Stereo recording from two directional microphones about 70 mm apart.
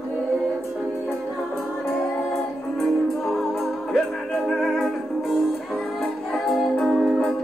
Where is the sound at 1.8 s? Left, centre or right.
Centre.